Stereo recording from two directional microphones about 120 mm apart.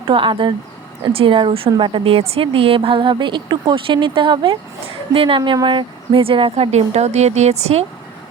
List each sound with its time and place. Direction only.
0.1 s a woman's voice: 45° right (ahead or behind)
5.4 s speech: 30° right (ahead or behind)
5.6 s a woman's voice: 45° right (ahead or behind)
6.7 s a woman's voice: 65° right (ahead or behind)